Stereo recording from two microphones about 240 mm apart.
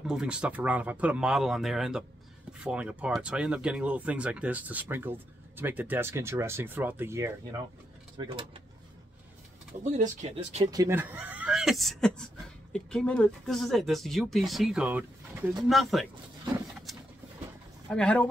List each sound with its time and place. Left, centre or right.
0.0 s speech: centre
9.8 s speech: right
10.7 s speech: centre
17.8 s speech: centre